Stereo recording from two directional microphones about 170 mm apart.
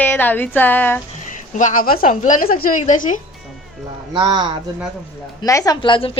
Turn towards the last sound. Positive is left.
turn(degrees=30)  # may be behind; listen again after turning